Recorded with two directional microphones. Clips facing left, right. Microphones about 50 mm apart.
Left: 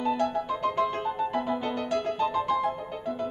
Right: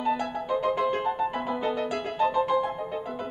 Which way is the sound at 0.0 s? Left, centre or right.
Centre.